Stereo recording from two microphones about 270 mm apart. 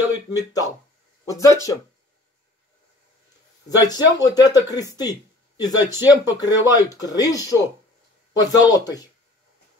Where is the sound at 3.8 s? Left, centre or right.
Centre.